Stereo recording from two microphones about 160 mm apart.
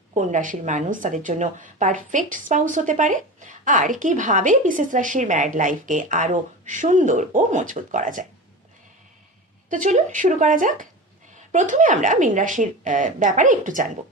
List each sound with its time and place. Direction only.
0.1 s speech: 50° right (ahead or behind)
9.6 s speech: 55° right (ahead or behind)